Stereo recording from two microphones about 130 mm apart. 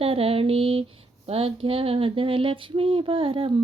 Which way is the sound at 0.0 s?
45° right (ahead or behind).